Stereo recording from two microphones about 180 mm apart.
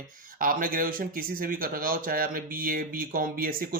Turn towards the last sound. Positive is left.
turn(degrees=-55)  # may be behind; listen again after turning